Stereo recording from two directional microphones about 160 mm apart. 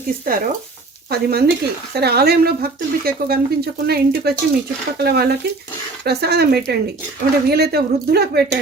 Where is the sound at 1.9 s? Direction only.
85° right.